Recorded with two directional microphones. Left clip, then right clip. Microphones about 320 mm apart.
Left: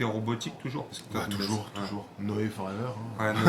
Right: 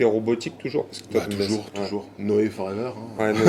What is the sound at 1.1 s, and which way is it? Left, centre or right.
Speech, left.